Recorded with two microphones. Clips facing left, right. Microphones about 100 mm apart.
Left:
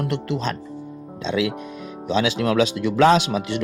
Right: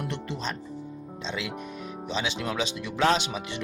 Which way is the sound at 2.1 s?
90° left.